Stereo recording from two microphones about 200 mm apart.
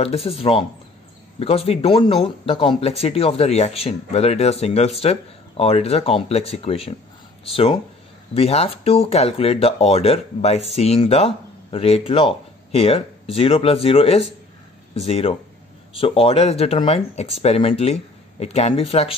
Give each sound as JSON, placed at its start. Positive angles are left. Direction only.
{"t": 0.0, "sound": "speech", "side_deg": 30}